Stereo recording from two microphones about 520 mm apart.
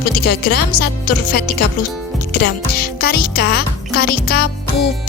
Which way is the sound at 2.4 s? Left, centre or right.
Centre.